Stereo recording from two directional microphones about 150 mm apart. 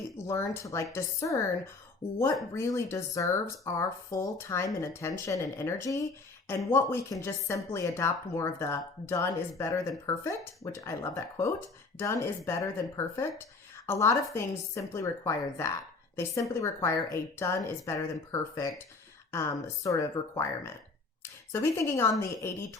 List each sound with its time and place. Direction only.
0.3 s speech: 20° left (ahead or behind)